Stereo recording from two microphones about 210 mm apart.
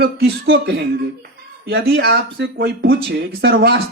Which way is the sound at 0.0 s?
45° right (ahead or behind).